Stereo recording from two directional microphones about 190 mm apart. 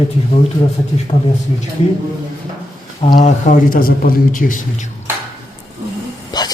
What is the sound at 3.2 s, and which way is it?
A man's voice, 40° left (ahead or behind).